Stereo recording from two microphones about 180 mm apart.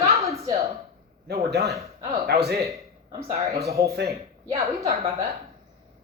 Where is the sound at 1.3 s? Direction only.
65° right (ahead or behind).